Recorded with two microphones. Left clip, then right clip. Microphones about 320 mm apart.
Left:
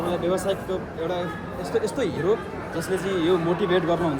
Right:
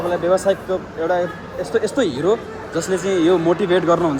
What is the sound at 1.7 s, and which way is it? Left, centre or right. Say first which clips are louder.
Speech: right 6 dB; right.